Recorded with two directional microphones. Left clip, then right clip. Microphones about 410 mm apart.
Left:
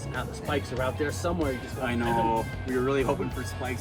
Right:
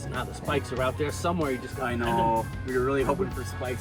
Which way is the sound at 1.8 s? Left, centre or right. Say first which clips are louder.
Even; centre.